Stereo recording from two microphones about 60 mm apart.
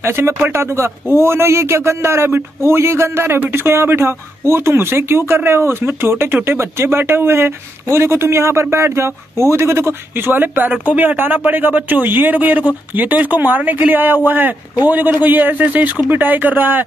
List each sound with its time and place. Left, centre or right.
0.0 s speech: right
3.3 s speech: right
3.6 s speech: right